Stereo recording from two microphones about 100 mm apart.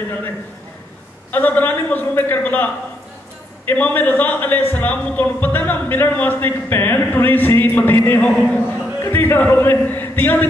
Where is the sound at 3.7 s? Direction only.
15° left (ahead or behind).